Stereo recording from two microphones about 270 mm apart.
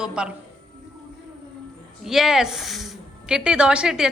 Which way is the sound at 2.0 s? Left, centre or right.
Centre.